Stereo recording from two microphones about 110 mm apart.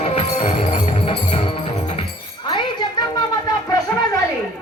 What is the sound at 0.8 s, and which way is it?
Music, 75° left (ahead or behind).